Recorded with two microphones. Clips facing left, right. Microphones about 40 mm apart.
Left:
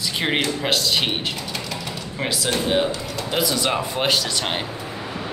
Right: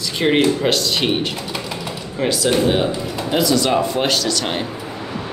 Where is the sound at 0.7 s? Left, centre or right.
Centre.